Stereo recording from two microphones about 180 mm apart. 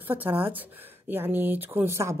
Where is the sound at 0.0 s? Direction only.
10° right (ahead or behind).